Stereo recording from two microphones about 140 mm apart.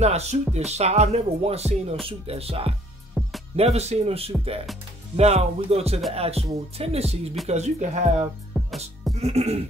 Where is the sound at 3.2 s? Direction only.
Centre (ahead or behind).